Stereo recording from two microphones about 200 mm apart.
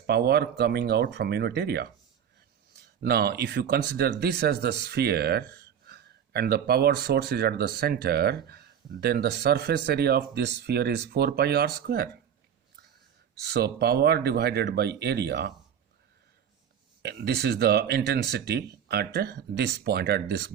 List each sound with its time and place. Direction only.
0.1 s speech: 50° right (ahead or behind)
3.0 s speech: 50° right (ahead or behind)
13.4 s speech: 55° right (ahead or behind)
17.0 s speech: 55° right (ahead or behind)